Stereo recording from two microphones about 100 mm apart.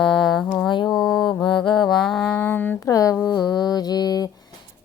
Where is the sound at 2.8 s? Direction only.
35° left (ahead or behind).